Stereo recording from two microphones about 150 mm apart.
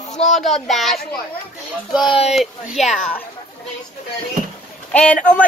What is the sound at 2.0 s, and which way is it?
Child singing, 35° left (ahead or behind).